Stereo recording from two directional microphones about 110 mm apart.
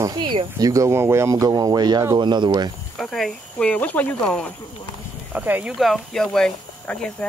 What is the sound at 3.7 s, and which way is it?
Speech, 15° left (ahead or behind).